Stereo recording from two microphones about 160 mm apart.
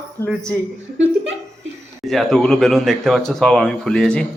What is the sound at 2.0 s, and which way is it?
Speech, centre (ahead or behind).